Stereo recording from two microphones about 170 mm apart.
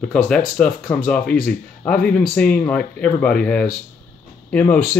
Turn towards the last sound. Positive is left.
turn(degrees=5)  # may be behind; listen again after turning